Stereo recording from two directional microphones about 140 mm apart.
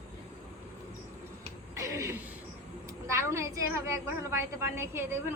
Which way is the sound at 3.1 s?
20° right (ahead or behind).